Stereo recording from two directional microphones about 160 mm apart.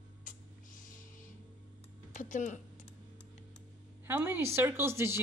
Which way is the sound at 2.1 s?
50° left (ahead or behind).